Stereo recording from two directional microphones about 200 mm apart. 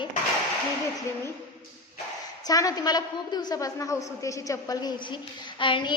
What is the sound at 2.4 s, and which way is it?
A woman's voice, 20° left (ahead or behind).